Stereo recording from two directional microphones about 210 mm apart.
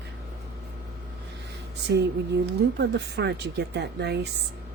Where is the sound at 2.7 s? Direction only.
55° right (ahead or behind).